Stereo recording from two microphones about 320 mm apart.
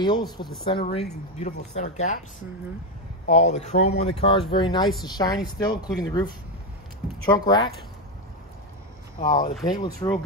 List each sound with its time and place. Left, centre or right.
0.0 s a woman's voice: centre
3.3 s a woman's voice: left
7.2 s a woman's voice: centre
9.7 s a woman's voice: centre